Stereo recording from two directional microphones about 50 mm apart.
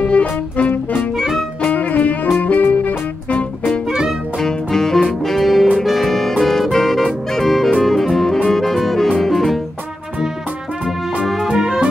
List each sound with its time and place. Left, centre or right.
0.0 s music: left
4.4 s music: centre
9.2 s saxophone: centre
11.5 s music: centre